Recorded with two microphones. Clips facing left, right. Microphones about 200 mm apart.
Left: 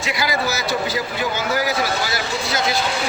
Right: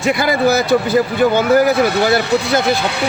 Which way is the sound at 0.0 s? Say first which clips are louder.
Right 8 dB; 55° right (ahead or behind).